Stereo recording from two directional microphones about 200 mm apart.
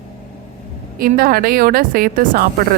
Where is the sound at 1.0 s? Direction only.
45° right (ahead or behind).